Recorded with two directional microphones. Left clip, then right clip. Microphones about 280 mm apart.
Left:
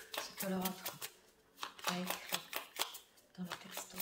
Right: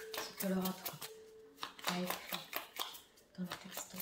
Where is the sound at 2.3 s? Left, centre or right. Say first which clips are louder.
Left 2 dB; centre.